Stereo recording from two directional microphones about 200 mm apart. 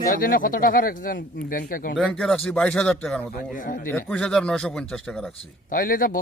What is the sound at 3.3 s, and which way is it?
Speech, 40° left (ahead or behind).